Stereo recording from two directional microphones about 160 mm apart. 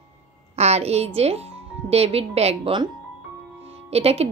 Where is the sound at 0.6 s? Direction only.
40° right (ahead or behind).